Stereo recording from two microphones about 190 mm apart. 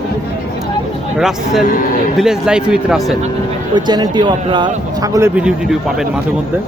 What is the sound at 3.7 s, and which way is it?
Speech, 25° right (ahead or behind).